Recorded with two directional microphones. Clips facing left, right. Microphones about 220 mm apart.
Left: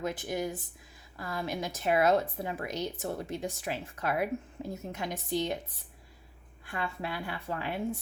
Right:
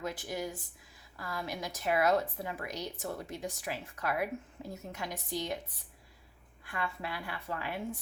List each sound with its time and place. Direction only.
0.0 s a woman's voice: 20° left (ahead or behind)
6.7 s a woman's voice: 25° left (ahead or behind)